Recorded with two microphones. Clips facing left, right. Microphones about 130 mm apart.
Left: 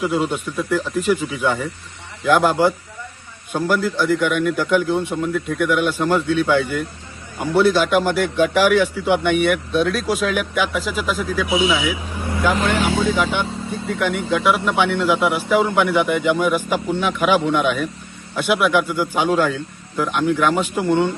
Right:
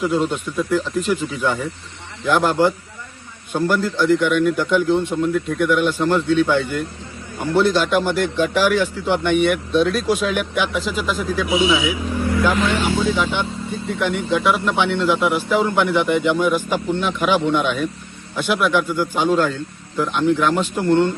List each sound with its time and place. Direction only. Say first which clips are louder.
0.0 s speech: right 1 dB; 5° left (ahead or behind)
12.3 s vehicle: even; 25° left (ahead or behind)
12.7 s speech: left 1 dB; 90° left
13.1 s a man's voice: left 1 dB; 5° left (ahead or behind)